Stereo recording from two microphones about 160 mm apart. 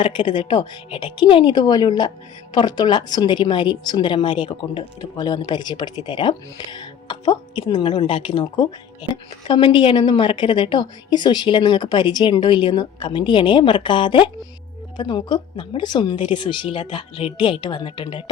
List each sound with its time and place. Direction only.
0.0 s a woman's voice: 30° left (ahead or behind)